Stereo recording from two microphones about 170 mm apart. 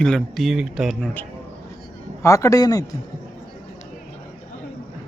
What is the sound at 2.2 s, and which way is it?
Speech, 20° left (ahead or behind).